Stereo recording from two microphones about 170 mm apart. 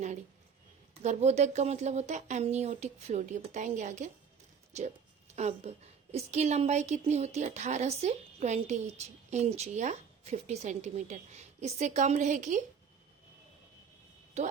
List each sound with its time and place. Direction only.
1.0 s a woman's voice: 40° right (ahead or behind)
14.4 s a woman's voice: 40° right (ahead or behind)